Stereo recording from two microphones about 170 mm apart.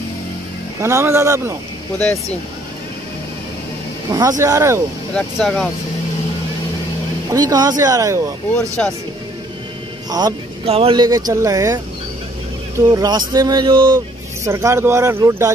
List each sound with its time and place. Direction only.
0.7 s speech: 15° right (ahead or behind)
4.1 s speech: 20° right (ahead or behind)
5.1 s speech: 5° left (ahead or behind)
7.3 s speech: 20° right (ahead or behind)
8.8 s speech: 5° left (ahead or behind)
10.0 s speech: 25° right (ahead or behind)
10.6 s speech: 35° right (ahead or behind); by 15.5 s 15° right (ahead or behind)